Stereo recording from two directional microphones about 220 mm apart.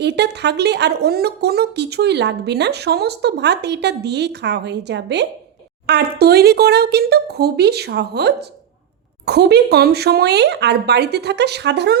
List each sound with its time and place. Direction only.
0.0 s speech: 50° right (ahead or behind)